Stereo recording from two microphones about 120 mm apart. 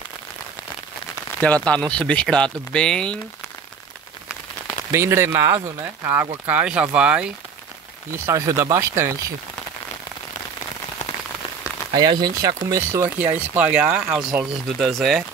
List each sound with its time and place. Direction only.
1.4 s speech: 10° left (ahead or behind)
4.9 s speech: 20° right (ahead or behind)
8.3 s speech: 25° right (ahead or behind)
11.9 s speech: 40° right (ahead or behind)
13.2 s speech: 15° right (ahead or behind)